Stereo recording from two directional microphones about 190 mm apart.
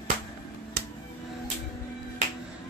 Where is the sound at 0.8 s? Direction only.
55° right (ahead or behind).